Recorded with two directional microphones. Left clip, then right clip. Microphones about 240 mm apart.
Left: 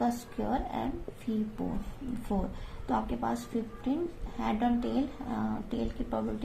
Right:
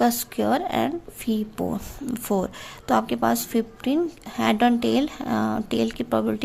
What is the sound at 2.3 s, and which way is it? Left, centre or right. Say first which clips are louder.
Speech: right 11 dB; right.